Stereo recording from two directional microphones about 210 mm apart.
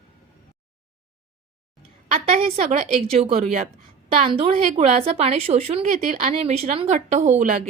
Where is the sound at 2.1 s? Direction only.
30° right (ahead or behind).